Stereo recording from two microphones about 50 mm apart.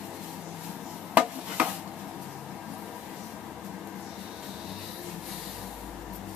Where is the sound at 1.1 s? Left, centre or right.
Right.